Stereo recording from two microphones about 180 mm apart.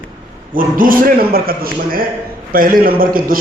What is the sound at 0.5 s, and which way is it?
A man's voice, 50° right (ahead or behind).